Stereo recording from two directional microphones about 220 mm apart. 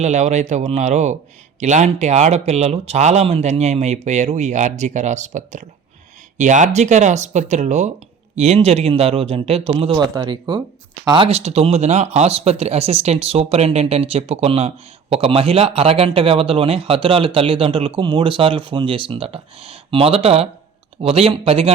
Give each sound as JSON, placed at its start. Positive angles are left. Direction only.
{"t": 0.0, "sound": "speech", "side_deg": -30}